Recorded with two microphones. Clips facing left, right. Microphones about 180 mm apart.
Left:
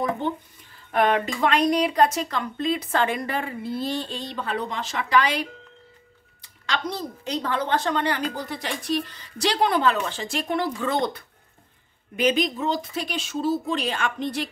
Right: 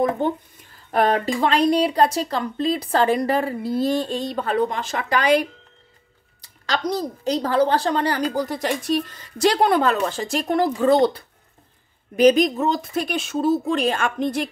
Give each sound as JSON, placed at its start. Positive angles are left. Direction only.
{"t": 0.9, "sound": "speech", "side_deg": -35}
{"t": 6.4, "sound": "speech", "side_deg": -40}